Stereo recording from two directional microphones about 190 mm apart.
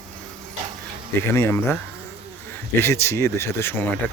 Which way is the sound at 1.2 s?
15° left (ahead or behind).